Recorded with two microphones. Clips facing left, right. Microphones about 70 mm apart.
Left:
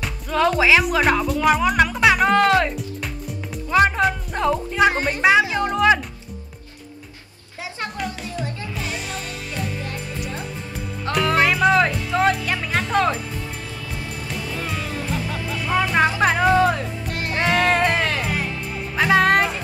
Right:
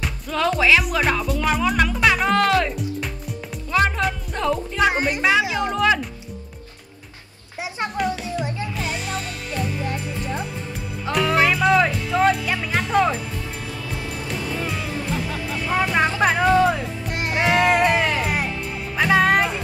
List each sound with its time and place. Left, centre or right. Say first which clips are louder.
0.0 s speech: left 3 dB; centre
3.7 s speech: left 3 dB; centre
8.7 s music: right 2 dB; centre
11.1 s speech: even; centre
14.8 s music: even; centre
15.7 s speech: left 2 dB; centre
17.1 s music: right 1 dB; centre
18.9 s speech: left 1 dB; centre